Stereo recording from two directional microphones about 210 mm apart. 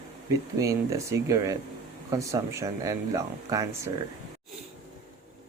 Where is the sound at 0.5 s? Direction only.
15° right (ahead or behind).